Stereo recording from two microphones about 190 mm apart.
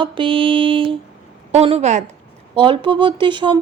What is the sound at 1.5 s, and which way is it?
Speech, 35° right (ahead or behind).